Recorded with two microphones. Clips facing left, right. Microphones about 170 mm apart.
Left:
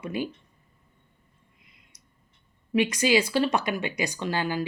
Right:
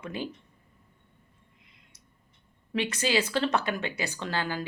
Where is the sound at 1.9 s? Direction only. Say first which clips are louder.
Right 1 dB; 15° left (ahead or behind).